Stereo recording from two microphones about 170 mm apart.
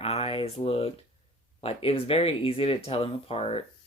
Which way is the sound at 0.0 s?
35° left (ahead or behind).